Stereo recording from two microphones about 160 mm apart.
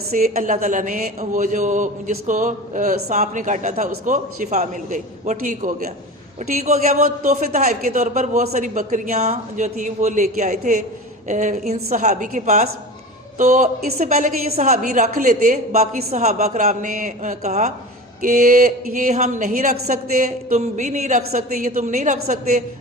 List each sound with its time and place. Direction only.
0.1 s a woman's voice: 50° right (ahead or behind)
18.2 s speech: 60° right (ahead or behind)
19.4 s a woman's voice: 65° right (ahead or behind)